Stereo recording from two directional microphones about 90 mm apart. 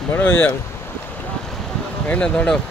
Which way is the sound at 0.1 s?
20° left (ahead or behind).